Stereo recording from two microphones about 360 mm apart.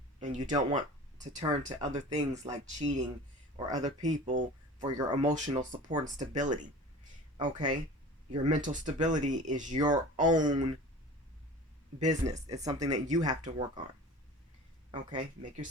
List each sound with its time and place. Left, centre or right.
0.2 s speech: centre
11.9 s speech: centre
15.1 s speech: right